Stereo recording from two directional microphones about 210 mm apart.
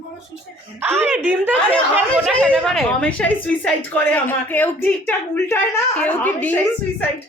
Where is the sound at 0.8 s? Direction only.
10° right (ahead or behind).